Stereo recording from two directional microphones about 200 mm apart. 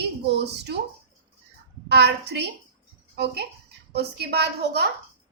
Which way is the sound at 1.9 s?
55° right (ahead or behind).